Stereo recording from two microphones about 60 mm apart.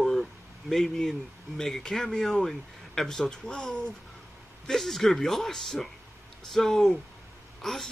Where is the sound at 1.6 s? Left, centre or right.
Centre.